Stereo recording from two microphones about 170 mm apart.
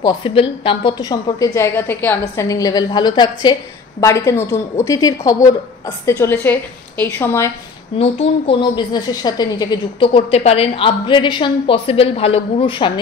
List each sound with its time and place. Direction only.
0.0 s a woman's voice: 30° left (ahead or behind)
8.0 s a woman's voice: 35° left (ahead or behind)